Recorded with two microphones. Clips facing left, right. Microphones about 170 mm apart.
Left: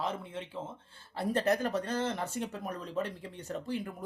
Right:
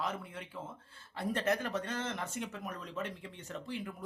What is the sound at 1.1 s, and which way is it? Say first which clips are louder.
Speech: left 4 dB; 35° left (ahead or behind).